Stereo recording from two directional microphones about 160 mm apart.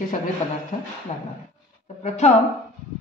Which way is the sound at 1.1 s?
40° left (ahead or behind).